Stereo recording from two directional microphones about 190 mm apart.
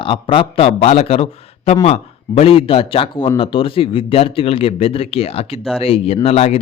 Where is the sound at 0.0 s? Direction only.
25° left (ahead or behind).